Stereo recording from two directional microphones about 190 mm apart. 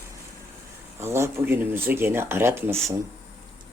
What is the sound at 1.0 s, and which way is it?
Speech, 15° right (ahead or behind).